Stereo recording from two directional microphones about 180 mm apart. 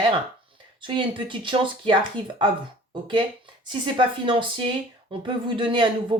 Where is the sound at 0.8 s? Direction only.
25° right (ahead or behind).